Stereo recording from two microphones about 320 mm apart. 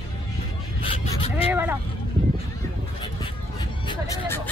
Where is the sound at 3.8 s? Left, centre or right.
Centre.